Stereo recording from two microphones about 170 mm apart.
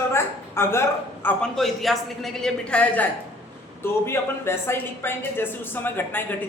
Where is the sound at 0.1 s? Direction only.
15° left (ahead or behind).